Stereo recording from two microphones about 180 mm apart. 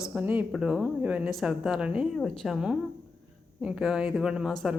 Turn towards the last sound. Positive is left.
turn(degrees=0)  # may be behind; listen again after turning